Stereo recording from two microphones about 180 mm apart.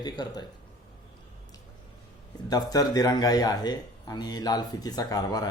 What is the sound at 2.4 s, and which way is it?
Speech, 20° left (ahead or behind).